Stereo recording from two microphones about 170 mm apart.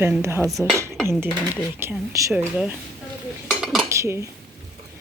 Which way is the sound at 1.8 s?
15° right (ahead or behind).